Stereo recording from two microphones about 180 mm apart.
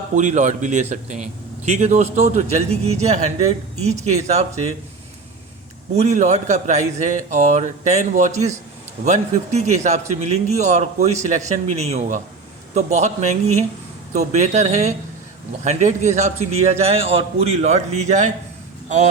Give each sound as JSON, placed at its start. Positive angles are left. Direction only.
{"t": 0.2, "sound": "a man's voice", "side_deg": -40}
{"t": 6.0, "sound": "a man's voice", "side_deg": -40}